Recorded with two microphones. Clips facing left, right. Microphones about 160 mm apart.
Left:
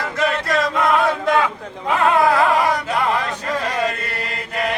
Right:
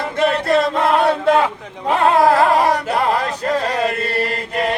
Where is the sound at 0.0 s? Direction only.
30° right (ahead or behind).